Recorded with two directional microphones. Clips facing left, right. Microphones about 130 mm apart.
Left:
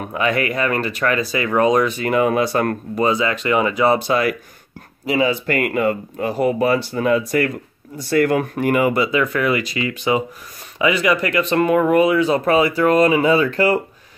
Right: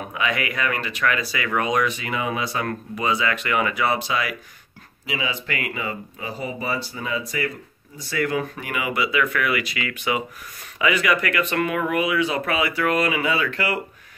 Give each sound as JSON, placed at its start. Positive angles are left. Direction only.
{"t": 0.1, "sound": "speech", "side_deg": 40}
{"t": 2.0, "sound": "speech", "side_deg": 50}
{"t": 3.2, "sound": "speech", "side_deg": 25}
{"t": 4.1, "sound": "speech", "side_deg": 45}